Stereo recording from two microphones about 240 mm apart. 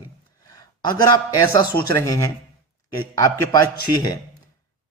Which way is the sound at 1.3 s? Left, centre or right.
Centre.